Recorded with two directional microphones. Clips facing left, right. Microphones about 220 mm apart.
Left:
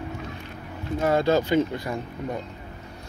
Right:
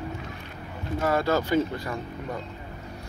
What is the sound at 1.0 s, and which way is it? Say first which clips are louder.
Speech: left 3 dB; 20° left (ahead or behind).